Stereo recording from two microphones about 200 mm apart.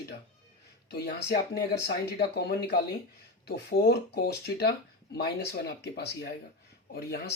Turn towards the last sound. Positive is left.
turn(degrees=50)  # may be behind; listen again after turning